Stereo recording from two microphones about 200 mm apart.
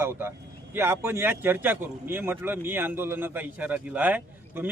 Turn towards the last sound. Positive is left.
turn(degrees=-10)  # may be behind; listen again after turning